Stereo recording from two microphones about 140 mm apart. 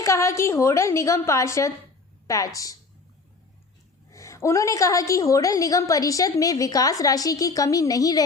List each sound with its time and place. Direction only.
0.0 s a woman's voice: 20° left (ahead or behind)
4.1 s a woman's voice: 20° left (ahead or behind)